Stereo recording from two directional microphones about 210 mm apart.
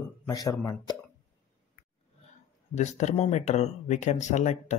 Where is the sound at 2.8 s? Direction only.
35° left (ahead or behind).